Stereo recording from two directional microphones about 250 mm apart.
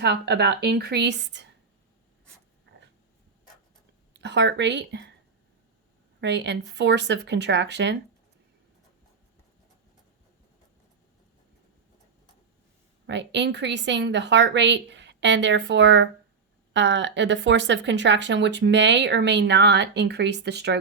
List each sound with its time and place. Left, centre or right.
0.0 s a woman's voice: right
4.1 s speech: right
6.1 s speech: right
13.1 s speech: right